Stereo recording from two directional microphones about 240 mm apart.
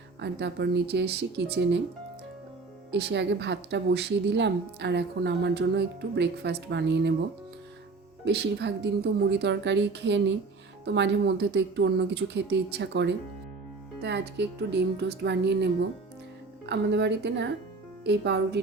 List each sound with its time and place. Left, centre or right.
0.2 s speech: right
2.9 s speech: right
8.2 s speech: right